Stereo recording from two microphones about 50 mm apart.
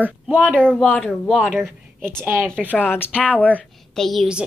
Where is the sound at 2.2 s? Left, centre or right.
Right.